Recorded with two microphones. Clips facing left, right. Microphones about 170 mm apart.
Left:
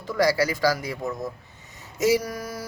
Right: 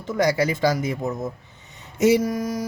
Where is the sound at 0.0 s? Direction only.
20° right (ahead or behind).